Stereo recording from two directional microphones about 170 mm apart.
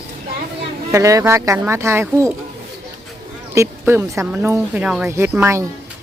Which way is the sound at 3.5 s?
15° right (ahead or behind).